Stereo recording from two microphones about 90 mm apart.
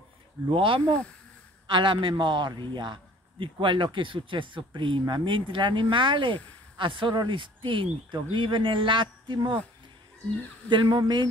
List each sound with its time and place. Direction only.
0.5 s a man's voice: 75° right (ahead or behind); by 9.6 s 55° right (ahead or behind)
10.7 s a man's voice: 60° right (ahead or behind)